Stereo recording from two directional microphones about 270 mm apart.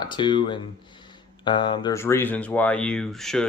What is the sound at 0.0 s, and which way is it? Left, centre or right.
Speech, centre.